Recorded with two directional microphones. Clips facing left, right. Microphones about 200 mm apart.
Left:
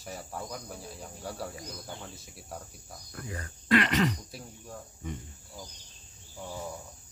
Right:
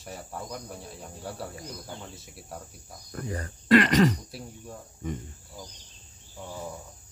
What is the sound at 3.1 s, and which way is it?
Speech, 40° right (ahead or behind).